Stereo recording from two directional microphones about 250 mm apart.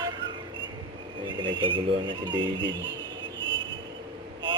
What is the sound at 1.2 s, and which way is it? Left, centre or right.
Speech, centre.